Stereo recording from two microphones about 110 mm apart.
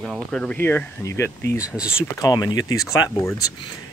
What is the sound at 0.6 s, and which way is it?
Speech, 20° left (ahead or behind).